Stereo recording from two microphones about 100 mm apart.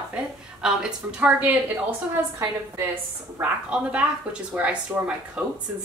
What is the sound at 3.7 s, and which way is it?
A woman's voice, 10° right (ahead or behind).